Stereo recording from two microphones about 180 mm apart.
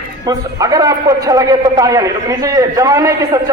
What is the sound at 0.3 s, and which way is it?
A man's voice, 20° right (ahead or behind).